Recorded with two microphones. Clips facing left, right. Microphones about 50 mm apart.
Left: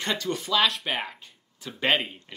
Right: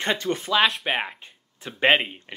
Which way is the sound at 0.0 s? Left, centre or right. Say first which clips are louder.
Right 3 dB; right.